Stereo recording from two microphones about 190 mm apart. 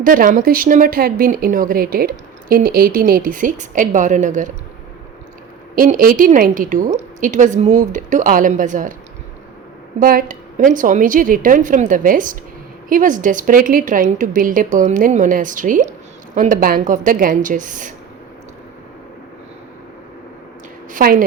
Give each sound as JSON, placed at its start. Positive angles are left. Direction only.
{"t": 0.0, "sound": "a woman's voice", "side_deg": -45}
{"t": 5.7, "sound": "a woman's voice", "side_deg": -45}
{"t": 10.0, "sound": "a woman's voice", "side_deg": -50}
{"t": 20.9, "sound": "a woman's voice", "side_deg": -50}